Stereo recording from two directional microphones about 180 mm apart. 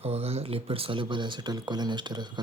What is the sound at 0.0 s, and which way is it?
Speech, 35° right (ahead or behind).